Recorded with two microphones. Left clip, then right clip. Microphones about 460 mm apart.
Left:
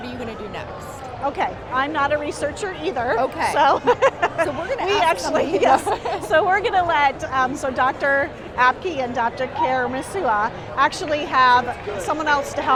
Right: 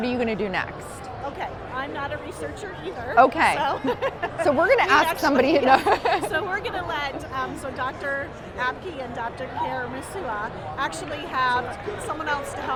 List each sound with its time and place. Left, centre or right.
0.0 s music: right
1.4 s a woman's voice: left
3.2 s speech: right
3.6 s a woman's voice: left
4.4 s speech: right
6.3 s a woman's voice: left